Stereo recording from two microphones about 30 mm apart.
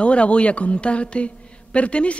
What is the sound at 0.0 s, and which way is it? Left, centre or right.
A woman's voice, left.